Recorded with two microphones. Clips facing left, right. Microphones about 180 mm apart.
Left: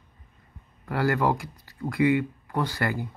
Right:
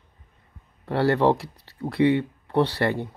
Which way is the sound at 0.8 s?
30° right (ahead or behind).